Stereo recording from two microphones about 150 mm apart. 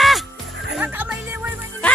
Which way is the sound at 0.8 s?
10° right (ahead or behind).